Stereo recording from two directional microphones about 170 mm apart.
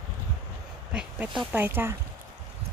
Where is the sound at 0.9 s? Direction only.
5° right (ahead or behind).